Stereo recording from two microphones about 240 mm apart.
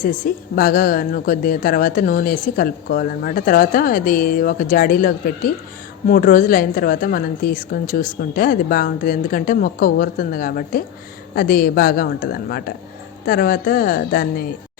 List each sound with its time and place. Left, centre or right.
0.0 s a woman's voice: left